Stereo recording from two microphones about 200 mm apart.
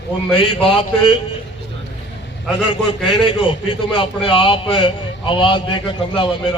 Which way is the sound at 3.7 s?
25° left (ahead or behind).